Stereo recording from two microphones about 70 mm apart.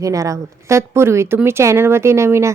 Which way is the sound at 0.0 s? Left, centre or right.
Right.